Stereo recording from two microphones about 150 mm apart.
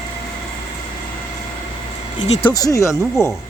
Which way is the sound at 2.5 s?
25° left (ahead or behind).